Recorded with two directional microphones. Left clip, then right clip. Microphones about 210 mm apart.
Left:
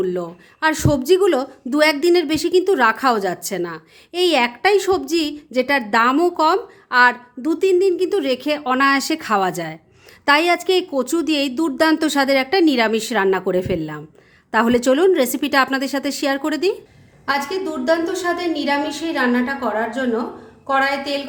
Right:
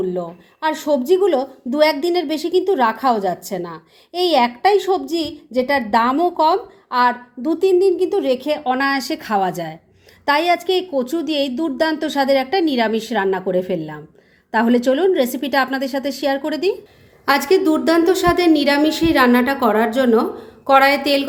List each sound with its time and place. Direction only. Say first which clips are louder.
0.0 s a woman's voice: even; 25° left (ahead or behind)
17.2 s a woman's voice: right 6 dB; 40° right (ahead or behind)